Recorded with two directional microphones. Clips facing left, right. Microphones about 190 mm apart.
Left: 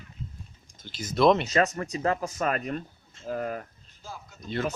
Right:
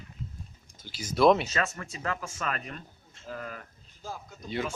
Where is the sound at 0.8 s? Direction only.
10° right (ahead or behind).